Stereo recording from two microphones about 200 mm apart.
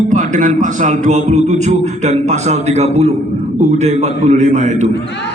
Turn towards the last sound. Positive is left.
turn(degrees=-35)  # may be behind; listen again after turning